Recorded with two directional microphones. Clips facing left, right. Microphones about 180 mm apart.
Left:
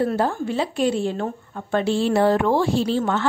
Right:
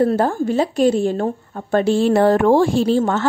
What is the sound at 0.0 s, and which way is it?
A woman's voice, 45° right (ahead or behind).